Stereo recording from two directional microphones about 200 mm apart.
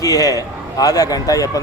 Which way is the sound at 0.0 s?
15° left (ahead or behind).